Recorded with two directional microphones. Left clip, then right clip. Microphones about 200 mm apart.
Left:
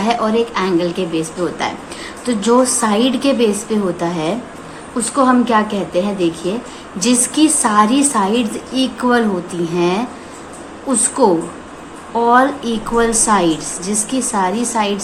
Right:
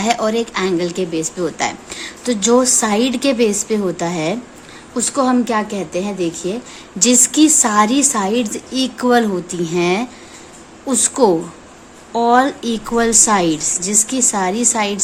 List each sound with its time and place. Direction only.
0.0 s speech: 50° right (ahead or behind)
12.1 s speech: 50° right (ahead or behind)